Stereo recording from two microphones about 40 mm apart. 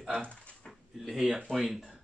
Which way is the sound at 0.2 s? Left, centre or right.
Left.